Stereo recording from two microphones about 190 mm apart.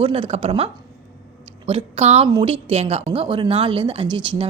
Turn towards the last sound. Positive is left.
turn(degrees=-25)  # may be behind; listen again after turning